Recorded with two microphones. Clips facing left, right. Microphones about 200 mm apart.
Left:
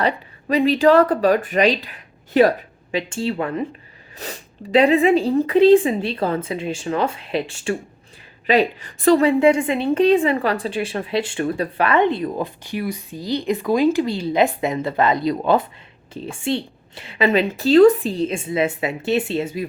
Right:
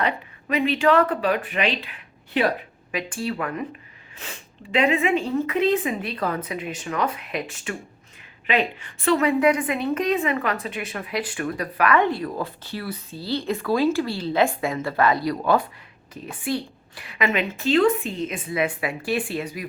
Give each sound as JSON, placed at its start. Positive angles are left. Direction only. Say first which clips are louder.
{"t": 0.0, "sound": "speech", "louder": "left 4 dB", "side_deg": 35}
{"t": 2.9, "sound": "a woman's voice", "louder": "left 5 dB", "side_deg": 25}